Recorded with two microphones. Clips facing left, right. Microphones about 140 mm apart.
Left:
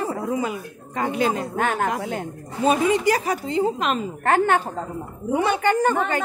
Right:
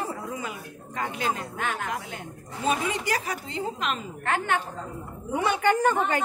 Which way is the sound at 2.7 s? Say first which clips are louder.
Left 8 dB; 30° left (ahead or behind).